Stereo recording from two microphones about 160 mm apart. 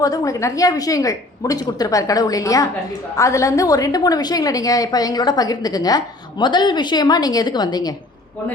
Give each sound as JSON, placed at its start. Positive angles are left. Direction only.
{"t": 0.0, "sound": "a woman's voice", "side_deg": 20}